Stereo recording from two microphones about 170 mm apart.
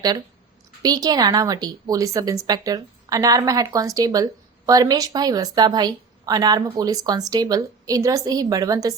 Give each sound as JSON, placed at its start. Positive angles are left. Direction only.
{"t": 0.8, "sound": "speech", "side_deg": -20}